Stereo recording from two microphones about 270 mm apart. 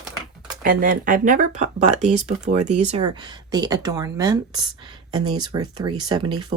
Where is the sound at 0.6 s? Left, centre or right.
Right.